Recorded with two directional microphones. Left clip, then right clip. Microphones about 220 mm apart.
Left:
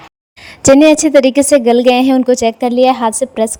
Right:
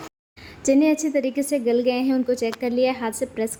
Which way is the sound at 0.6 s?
40° left (ahead or behind).